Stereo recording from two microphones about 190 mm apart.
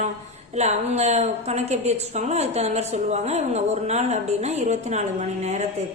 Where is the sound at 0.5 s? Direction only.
35° right (ahead or behind).